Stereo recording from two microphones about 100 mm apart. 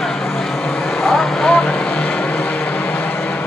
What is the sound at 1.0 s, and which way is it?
Vehicle, 5° left (ahead or behind).